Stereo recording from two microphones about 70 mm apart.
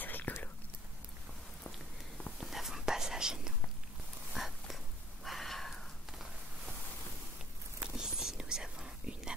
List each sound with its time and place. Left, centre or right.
0.0 s whispering: left
2.4 s whispering: centre
4.4 s a sound: centre
7.8 s whispering: centre